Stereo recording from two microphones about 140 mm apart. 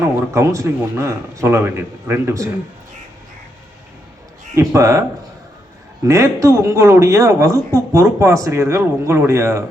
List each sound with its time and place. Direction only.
0.0 s speech: 20° right (ahead or behind)
4.5 s speech: 20° right (ahead or behind)
6.1 s speech: 20° right (ahead or behind)